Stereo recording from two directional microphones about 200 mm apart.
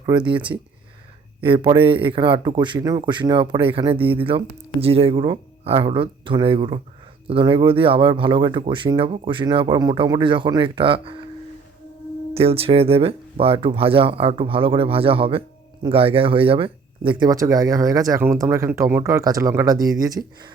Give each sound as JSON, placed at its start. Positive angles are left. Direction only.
{"t": 0.0, "sound": "speech", "side_deg": -20}
{"t": 12.3, "sound": "speech", "side_deg": -30}